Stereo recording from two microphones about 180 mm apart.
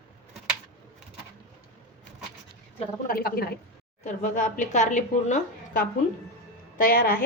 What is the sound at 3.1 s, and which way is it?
Speech, 60° left (ahead or behind).